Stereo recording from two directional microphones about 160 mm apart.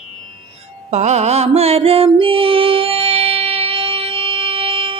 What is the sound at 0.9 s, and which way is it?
Music, 45° right (ahead or behind).